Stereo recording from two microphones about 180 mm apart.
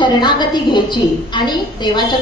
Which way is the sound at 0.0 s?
25° left (ahead or behind).